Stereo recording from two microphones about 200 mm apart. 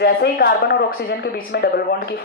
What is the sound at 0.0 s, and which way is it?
Speech, 50° left (ahead or behind).